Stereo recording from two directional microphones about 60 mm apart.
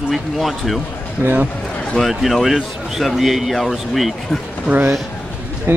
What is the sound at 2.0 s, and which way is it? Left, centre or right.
A man's voice, centre.